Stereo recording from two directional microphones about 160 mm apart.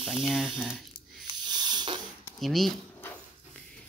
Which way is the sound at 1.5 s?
25° right (ahead or behind).